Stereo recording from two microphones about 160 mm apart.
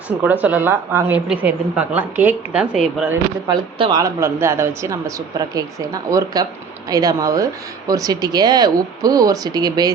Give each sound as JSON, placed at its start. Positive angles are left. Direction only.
{"t": 0.2, "sound": "a woman's voice", "side_deg": -10}
{"t": 3.4, "sound": "speech", "side_deg": -30}
{"t": 4.0, "sound": "speech", "side_deg": -15}